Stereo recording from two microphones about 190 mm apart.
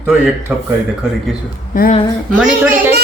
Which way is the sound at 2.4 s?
5° right (ahead or behind).